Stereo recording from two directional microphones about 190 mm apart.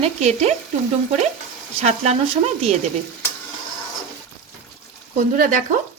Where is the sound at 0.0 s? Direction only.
35° right (ahead or behind).